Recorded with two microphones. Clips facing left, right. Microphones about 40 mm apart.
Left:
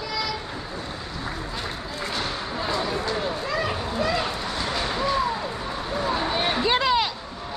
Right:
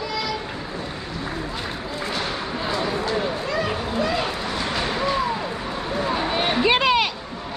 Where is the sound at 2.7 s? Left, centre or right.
Centre.